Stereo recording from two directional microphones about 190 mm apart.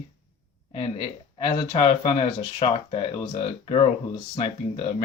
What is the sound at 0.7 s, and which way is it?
Speech, 25° left (ahead or behind).